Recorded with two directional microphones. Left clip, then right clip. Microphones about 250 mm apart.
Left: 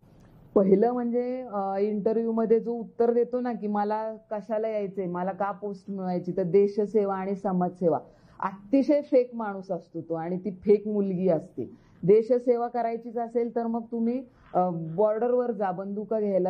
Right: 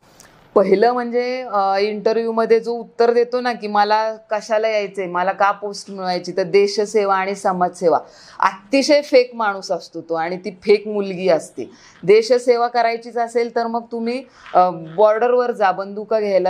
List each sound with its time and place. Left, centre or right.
0.6 s speech: centre
8.4 s speech: centre
9.6 s speech: right
10.1 s speech: centre
13.7 s speech: right
14.0 s speech: centre